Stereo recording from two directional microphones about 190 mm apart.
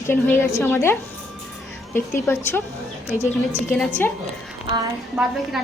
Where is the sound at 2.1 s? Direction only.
10° left (ahead or behind).